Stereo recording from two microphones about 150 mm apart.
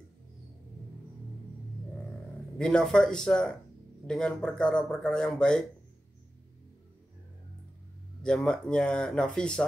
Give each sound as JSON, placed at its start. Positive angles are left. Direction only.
{"t": 2.6, "sound": "speech", "side_deg": 5}
{"t": 8.2, "sound": "speech", "side_deg": 5}